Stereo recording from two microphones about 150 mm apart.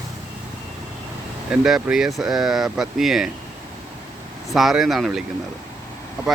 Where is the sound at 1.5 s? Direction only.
5° right (ahead or behind).